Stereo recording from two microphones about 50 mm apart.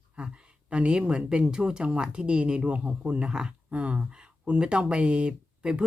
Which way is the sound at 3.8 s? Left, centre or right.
Right.